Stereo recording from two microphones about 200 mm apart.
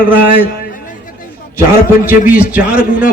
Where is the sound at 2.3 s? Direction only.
5° right (ahead or behind).